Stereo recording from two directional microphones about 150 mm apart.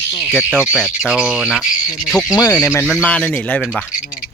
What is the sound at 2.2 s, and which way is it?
Speech, 25° left (ahead or behind).